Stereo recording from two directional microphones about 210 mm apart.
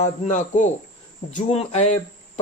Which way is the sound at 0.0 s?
35° left (ahead or behind).